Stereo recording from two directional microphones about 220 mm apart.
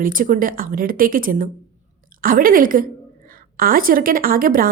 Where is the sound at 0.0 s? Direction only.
40° right (ahead or behind).